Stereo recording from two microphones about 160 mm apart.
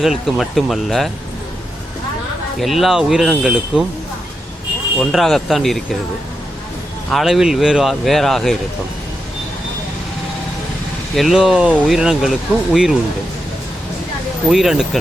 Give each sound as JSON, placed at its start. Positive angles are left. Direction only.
{"t": 0.0, "sound": "speech", "side_deg": 0}
{"t": 2.6, "sound": "speech", "side_deg": 0}
{"t": 4.9, "sound": "speech", "side_deg": 0}
{"t": 7.1, "sound": "speech", "side_deg": 0}
{"t": 11.1, "sound": "speech", "side_deg": 0}
{"t": 14.5, "sound": "speech", "side_deg": 0}